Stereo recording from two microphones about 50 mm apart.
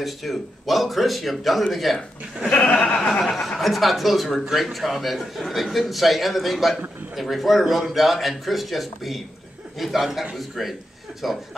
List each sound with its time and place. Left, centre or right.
0.0 s speech: centre
2.5 s a sound: left
3.2 s speech: centre